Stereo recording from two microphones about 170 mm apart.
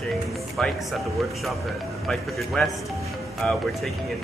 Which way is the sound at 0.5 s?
Centre (ahead or behind).